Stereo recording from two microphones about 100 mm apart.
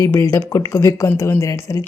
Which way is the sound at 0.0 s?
30° left (ahead or behind).